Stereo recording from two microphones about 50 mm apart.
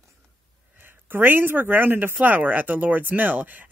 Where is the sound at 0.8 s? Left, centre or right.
Right.